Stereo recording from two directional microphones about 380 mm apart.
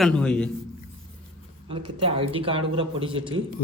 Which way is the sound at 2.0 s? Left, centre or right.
Centre.